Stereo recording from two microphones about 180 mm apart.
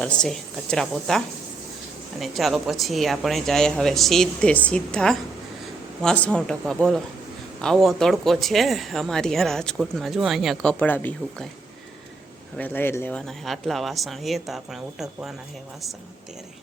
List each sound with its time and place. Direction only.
0.0 s speech: 5° left (ahead or behind)
12.5 s speech: 10° left (ahead or behind)